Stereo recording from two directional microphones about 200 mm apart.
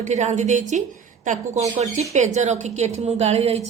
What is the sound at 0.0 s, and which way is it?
A woman's voice, 35° right (ahead or behind).